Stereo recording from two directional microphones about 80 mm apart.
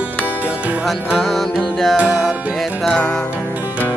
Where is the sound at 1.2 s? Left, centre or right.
Centre.